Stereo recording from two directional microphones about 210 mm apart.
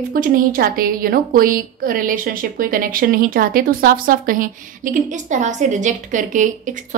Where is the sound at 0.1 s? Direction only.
40° right (ahead or behind).